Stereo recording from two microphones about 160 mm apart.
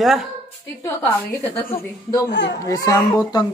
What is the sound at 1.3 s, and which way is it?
Speech, 10° left (ahead or behind).